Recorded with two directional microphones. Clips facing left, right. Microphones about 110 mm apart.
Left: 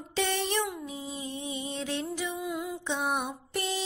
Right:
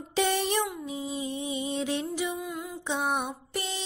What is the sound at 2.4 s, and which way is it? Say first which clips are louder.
Music: left 2 dB; 5° left (ahead or behind).